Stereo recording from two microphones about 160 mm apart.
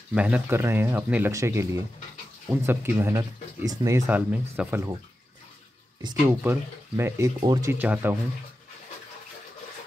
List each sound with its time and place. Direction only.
0.1 s speech: 10° right (ahead or behind)
6.2 s speech: 15° right (ahead or behind)
7.3 s speech: 25° right (ahead or behind)
7.7 s speech: 10° right (ahead or behind)